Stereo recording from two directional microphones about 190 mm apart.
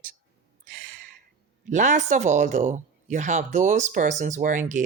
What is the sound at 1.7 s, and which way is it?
Speech, 40° right (ahead or behind).